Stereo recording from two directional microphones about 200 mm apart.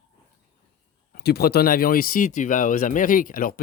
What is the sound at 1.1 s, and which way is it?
Speech, 50° left (ahead or behind).